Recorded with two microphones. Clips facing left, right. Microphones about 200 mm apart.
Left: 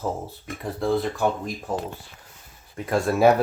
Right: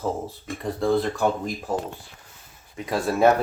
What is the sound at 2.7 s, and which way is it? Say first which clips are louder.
Speech: left 1 dB; 5° left (ahead or behind).